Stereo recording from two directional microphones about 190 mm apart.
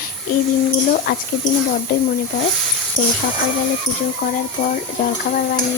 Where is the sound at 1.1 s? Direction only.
50° left (ahead or behind).